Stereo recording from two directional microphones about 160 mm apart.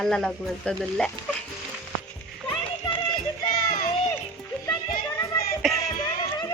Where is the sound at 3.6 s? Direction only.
65° left (ahead or behind).